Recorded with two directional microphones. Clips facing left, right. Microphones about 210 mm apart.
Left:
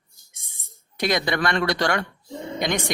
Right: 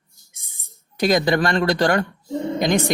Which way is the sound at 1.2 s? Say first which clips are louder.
Right 4 dB; 40° right (ahead or behind).